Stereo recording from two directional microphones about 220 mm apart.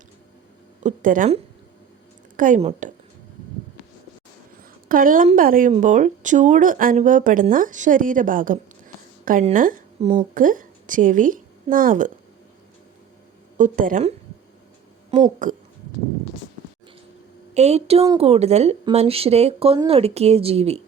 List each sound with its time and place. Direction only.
0.8 s a woman's voice: 35° right (ahead or behind)
4.9 s a woman's voice: 40° right (ahead or behind)
13.6 s speech: 35° right (ahead or behind)
15.4 s speech: 35° right (ahead or behind)
17.5 s speech: 30° right (ahead or behind)